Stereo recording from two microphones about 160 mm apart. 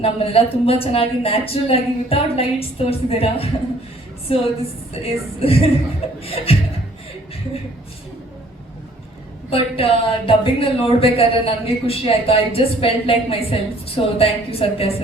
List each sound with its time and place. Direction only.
0.0 s a man's voice: 35° left (ahead or behind)
5.0 s a man's voice: 35° left (ahead or behind)
9.5 s a man's voice: 35° left (ahead or behind)